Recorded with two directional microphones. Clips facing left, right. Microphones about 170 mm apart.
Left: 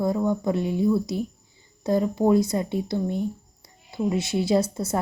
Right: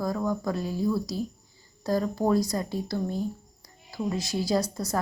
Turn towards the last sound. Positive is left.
turn(degrees=25)  # may be behind; listen again after turning